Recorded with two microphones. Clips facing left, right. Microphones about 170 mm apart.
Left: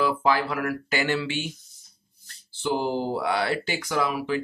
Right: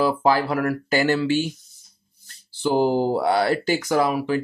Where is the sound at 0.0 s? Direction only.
35° right (ahead or behind).